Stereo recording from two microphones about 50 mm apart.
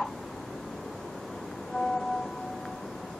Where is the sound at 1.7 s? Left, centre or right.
Centre.